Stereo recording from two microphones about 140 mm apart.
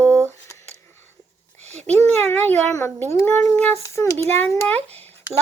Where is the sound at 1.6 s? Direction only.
50° right (ahead or behind).